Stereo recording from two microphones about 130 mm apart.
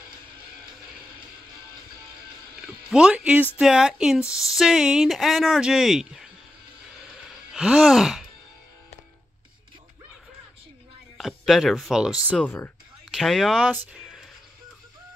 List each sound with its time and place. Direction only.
2.6 s speech: 5° right (ahead or behind)
7.5 s speech: 5° right (ahead or behind)
11.1 s speech: centre (ahead or behind)
12.4 s speech: 15° left (ahead or behind)
13.1 s speech: centre (ahead or behind)